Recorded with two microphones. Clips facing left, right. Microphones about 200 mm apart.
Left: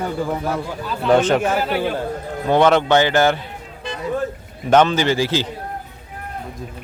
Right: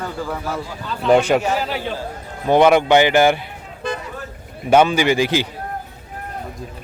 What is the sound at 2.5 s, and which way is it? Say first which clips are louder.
Speech: right 2 dB; 15° right (ahead or behind).